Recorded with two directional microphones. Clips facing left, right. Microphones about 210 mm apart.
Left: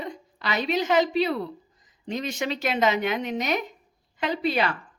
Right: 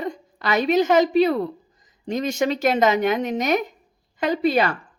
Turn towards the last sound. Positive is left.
turn(degrees=-45)  # may be behind; listen again after turning